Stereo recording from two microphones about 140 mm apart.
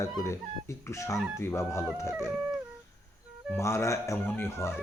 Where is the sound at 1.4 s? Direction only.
20° left (ahead or behind).